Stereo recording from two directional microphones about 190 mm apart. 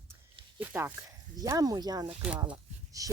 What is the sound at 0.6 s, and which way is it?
Speech, 10° right (ahead or behind).